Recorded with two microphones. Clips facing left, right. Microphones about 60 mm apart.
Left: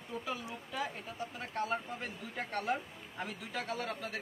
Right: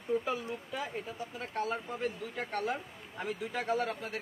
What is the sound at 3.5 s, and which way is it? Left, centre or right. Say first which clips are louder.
Speech: right 5 dB; right.